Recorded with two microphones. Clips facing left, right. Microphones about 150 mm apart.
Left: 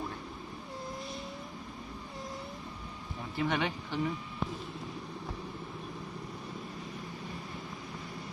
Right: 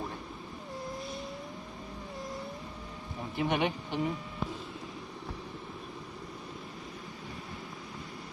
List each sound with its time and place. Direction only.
3.3 s speech: 20° right (ahead or behind)